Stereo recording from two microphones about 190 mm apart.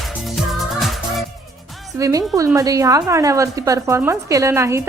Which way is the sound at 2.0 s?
15° right (ahead or behind).